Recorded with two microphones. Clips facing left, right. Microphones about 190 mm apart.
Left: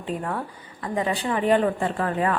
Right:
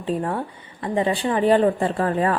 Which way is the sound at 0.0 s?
30° right (ahead or behind).